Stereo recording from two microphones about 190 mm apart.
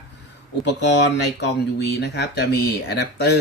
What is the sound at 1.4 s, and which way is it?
Speech, 60° left (ahead or behind).